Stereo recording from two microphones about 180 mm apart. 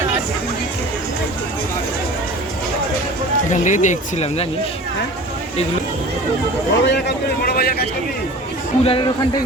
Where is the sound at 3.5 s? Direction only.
45° left (ahead or behind).